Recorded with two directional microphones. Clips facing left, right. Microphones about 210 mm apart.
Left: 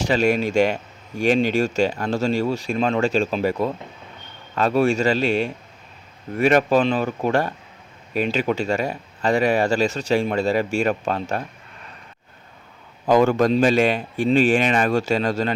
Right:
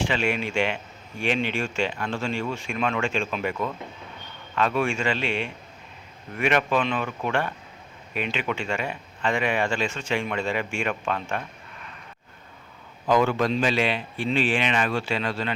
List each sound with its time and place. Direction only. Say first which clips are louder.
0.0 s speech: left 6 dB; 40° left (ahead or behind)
13.1 s speech: left 5 dB; 45° left (ahead or behind)